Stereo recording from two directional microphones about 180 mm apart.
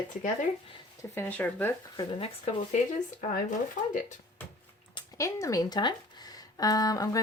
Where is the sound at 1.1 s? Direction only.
10° left (ahead or behind).